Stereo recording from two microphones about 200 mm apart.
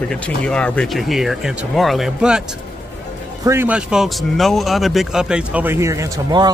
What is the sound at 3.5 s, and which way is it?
A man's voice, 10° right (ahead or behind).